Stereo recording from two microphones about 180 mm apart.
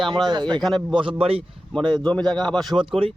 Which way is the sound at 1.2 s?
30° right (ahead or behind).